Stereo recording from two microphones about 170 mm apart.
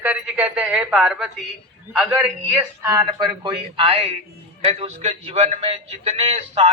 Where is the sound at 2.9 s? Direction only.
25° right (ahead or behind).